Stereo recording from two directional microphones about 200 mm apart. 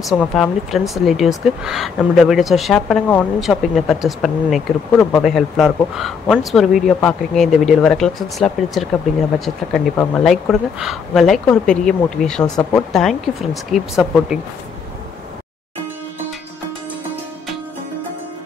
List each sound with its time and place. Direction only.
0.1 s speech: centre (ahead or behind)
9.9 s speech: 5° left (ahead or behind)